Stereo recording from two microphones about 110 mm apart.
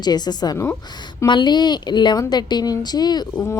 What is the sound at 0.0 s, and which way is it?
A woman's voice, 40° left (ahead or behind).